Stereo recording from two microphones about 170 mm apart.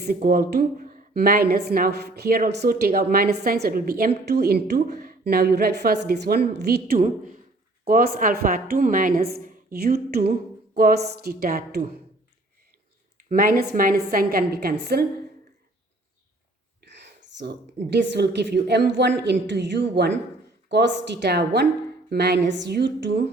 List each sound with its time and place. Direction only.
0.3 s a woman's voice: 65° right (ahead or behind)
13.3 s a woman's voice: 55° right (ahead or behind)
16.8 s whispering: 90° right
17.2 s a sound: 90° right
17.9 s a woman's voice: 85° right